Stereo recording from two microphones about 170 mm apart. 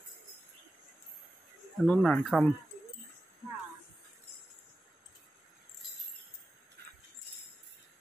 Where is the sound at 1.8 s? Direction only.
5° left (ahead or behind).